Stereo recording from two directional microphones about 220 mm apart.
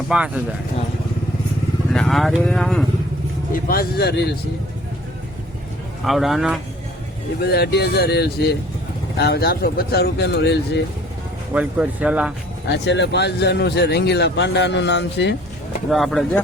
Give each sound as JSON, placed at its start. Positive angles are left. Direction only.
{"t": 0.1, "sound": "speech", "side_deg": -5}
{"t": 1.9, "sound": "speech", "side_deg": 0}
{"t": 3.5, "sound": "speech", "side_deg": 40}
{"t": 6.1, "sound": "speech", "side_deg": 0}
{"t": 7.4, "sound": "speech", "side_deg": 45}
{"t": 11.5, "sound": "speech", "side_deg": -5}
{"t": 12.8, "sound": "speech", "side_deg": 50}
{"t": 15.9, "sound": "speech", "side_deg": 0}